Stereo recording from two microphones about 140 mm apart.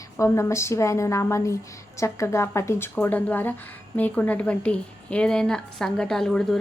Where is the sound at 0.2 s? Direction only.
20° left (ahead or behind).